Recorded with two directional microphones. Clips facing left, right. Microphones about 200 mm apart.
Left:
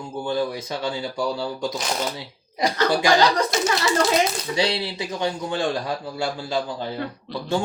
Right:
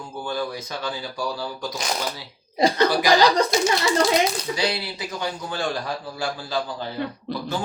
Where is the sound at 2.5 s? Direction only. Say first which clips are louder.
Right 3 dB; 25° right (ahead or behind).